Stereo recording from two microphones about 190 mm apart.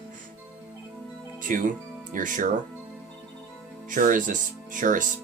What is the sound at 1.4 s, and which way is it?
Speech, 45° right (ahead or behind).